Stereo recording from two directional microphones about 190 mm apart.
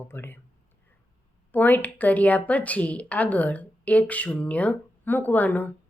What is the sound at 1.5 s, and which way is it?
A woman's voice, 10° left (ahead or behind).